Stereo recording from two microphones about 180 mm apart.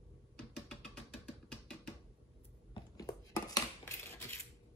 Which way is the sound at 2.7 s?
20° left (ahead or behind).